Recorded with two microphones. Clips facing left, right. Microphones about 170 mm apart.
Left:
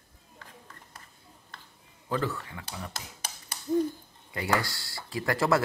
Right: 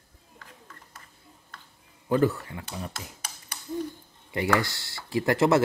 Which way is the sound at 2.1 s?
25° right (ahead or behind).